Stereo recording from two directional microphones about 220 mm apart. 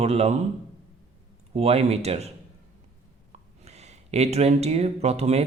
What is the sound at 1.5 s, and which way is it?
Speech, 30° right (ahead or behind).